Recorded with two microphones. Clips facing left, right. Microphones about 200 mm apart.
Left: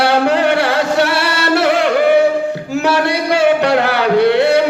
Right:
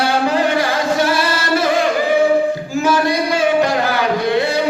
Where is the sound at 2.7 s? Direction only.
70° left (ahead or behind).